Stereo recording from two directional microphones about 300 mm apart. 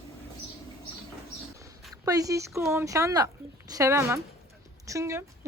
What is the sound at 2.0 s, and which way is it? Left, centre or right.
A woman's voice, centre.